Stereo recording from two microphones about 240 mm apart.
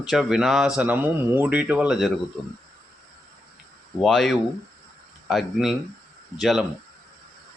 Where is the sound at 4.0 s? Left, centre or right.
Centre.